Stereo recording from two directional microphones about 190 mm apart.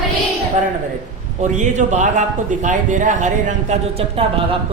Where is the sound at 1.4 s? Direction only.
40° right (ahead or behind).